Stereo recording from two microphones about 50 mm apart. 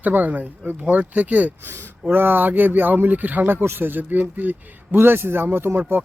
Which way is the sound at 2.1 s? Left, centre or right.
Right.